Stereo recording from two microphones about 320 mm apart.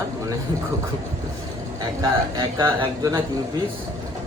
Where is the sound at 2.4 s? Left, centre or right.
Centre.